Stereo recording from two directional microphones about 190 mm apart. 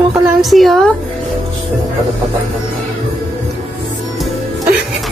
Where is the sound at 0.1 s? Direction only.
Centre (ahead or behind).